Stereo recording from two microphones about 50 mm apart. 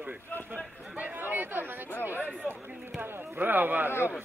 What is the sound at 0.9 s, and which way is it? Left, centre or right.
Chatter, right.